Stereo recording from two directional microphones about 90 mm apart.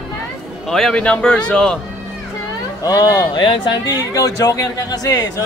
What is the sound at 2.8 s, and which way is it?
Speech, 40° left (ahead or behind).